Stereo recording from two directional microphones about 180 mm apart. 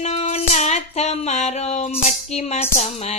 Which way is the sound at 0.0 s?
35° left (ahead or behind).